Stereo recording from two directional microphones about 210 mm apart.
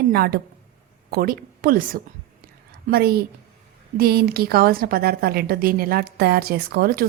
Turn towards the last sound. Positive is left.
turn(degrees=-45)  # may be behind; listen again after turning